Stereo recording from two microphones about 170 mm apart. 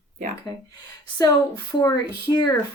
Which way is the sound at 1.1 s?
20° left (ahead or behind).